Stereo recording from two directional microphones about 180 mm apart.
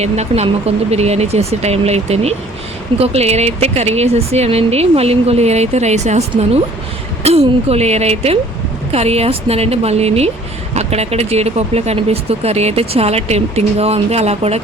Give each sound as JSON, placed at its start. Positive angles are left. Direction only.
{"t": 0.0, "sound": "speech", "side_deg": -35}